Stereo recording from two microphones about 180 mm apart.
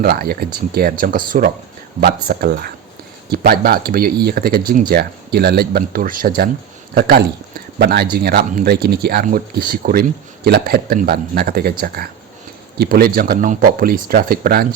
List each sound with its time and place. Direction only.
0.0 s speech: 55° right (ahead or behind)